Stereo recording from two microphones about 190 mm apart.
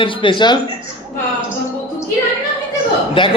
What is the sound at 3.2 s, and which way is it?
Speech, 25° left (ahead or behind).